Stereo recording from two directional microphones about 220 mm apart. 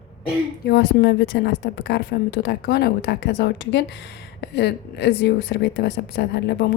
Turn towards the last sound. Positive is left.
turn(degrees=50)  # may be behind; listen again after turning